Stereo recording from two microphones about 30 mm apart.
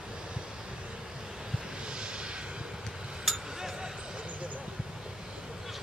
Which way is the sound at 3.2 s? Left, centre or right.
Centre.